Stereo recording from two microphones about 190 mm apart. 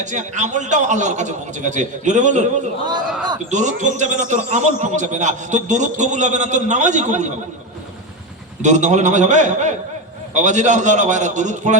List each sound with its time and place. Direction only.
0.0 s a man's voice: 40° right (ahead or behind)
8.6 s a man's voice: 40° right (ahead or behind)